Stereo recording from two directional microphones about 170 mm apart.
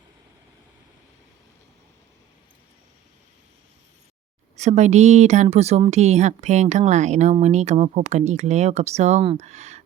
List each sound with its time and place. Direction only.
4.5 s a woman's voice: 40° right (ahead or behind)